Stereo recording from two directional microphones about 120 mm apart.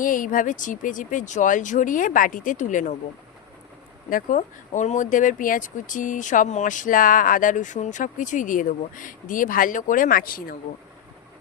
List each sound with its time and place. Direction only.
0.0 s speech: 90° left
4.3 s speech: 90° left